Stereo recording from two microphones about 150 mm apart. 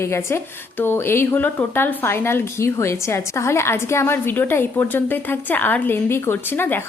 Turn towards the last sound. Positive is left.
turn(degrees=15)  # may be behind; listen again after turning